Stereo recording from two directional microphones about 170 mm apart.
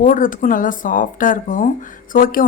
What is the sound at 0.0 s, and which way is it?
Speech, 50° left (ahead or behind).